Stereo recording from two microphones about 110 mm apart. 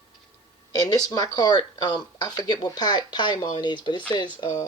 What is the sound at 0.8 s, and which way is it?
A woman's voice, 35° left (ahead or behind).